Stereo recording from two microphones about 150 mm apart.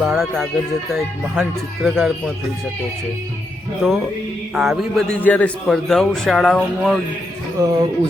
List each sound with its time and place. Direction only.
0.0 s speech: centre (ahead or behind)
3.8 s speech: 5° left (ahead or behind)
5.2 s speech: 10° left (ahead or behind)
7.6 s speech: 25° right (ahead or behind)